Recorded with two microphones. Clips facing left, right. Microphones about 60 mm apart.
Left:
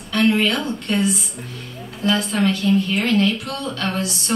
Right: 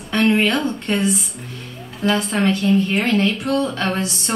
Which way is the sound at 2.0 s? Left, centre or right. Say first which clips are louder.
Right 1 dB; right.